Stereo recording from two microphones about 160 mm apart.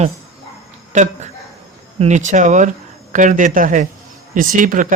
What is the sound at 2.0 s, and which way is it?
Speech, 50° right (ahead or behind).